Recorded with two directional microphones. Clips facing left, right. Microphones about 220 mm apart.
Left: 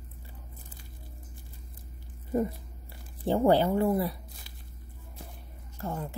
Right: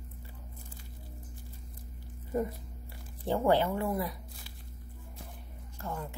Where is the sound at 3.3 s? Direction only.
30° left (ahead or behind).